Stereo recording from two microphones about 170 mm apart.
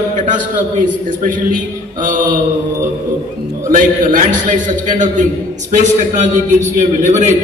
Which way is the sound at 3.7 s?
50° right (ahead or behind).